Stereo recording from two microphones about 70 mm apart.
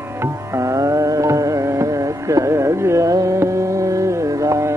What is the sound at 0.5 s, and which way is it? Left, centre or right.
Carnatic music, right.